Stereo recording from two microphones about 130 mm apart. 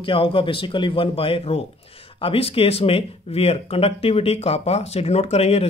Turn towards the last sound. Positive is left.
turn(degrees=50)  # may be behind; listen again after turning